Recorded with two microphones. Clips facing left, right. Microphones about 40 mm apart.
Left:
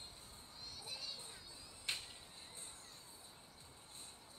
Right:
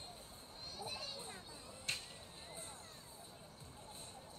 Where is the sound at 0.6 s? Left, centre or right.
Right.